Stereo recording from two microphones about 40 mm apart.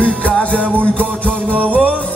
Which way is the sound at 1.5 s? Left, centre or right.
Right.